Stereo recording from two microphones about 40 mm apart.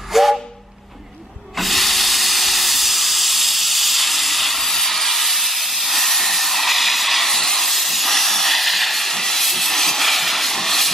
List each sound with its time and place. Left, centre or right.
0.1 s steam whistle: centre
1.6 s steam: centre